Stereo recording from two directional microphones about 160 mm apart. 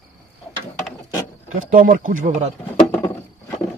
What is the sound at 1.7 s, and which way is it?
Speech, 60° right (ahead or behind).